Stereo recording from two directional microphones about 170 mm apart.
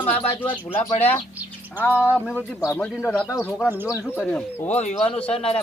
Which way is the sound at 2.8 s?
5° left (ahead or behind).